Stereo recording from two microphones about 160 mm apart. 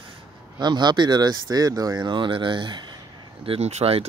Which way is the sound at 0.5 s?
25° right (ahead or behind).